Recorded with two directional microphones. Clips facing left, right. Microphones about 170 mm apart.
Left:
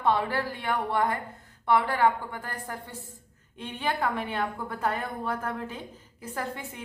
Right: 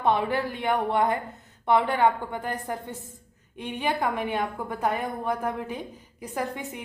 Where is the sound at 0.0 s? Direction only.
20° right (ahead or behind).